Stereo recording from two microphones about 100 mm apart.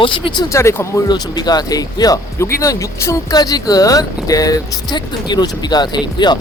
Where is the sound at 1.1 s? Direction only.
45° left (ahead or behind).